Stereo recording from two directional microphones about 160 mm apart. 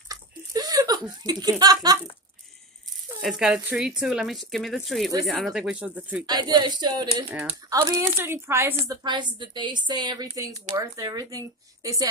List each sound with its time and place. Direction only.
0.1 s laughter: 25° right (ahead or behind)
3.2 s speech: 5° right (ahead or behind)
6.2 s speech: 25° right (ahead or behind)
7.2 s a woman's voice: 10° right (ahead or behind)
7.7 s a woman's voice: 20° right (ahead or behind)
9.0 s speech: 30° right (ahead or behind)